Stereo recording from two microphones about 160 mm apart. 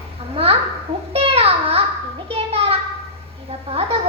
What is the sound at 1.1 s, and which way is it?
Speech, 35° right (ahead or behind).